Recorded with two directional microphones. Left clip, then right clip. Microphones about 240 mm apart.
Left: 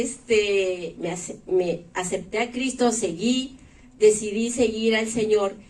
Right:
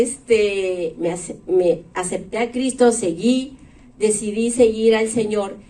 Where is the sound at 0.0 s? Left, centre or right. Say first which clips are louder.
Right 5 dB; right.